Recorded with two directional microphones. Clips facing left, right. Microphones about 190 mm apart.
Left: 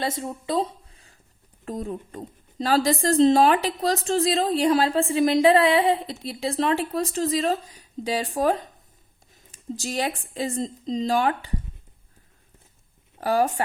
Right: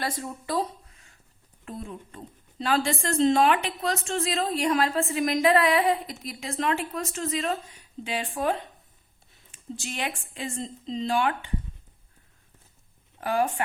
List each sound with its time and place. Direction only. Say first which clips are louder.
0.0 s a woman's voice: left 4 dB; 25° left (ahead or behind); by 11.5 s 40° left (ahead or behind)
13.1 s speech: left 4 dB; 35° left (ahead or behind)